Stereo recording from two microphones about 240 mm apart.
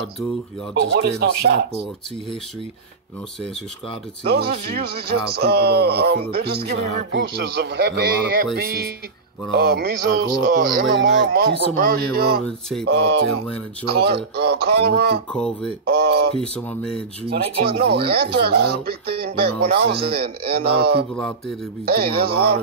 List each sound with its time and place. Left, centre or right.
0.7 s a man's voice: right
4.3 s a man's voice: right
12.4 s speech: centre
12.8 s a man's voice: right
15.3 s speech: centre
15.9 s a man's voice: right
16.3 s speech: centre
17.3 s speech: right